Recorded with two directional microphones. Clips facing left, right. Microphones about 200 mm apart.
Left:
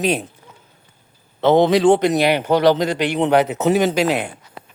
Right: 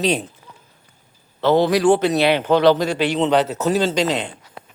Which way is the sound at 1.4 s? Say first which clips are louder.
Left 2 dB; 20° left (ahead or behind).